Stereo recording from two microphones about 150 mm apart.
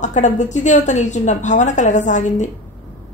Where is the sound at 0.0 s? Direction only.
55° left (ahead or behind).